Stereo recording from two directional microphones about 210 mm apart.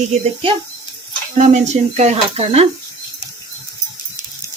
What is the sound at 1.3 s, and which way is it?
Speech, 35° right (ahead or behind).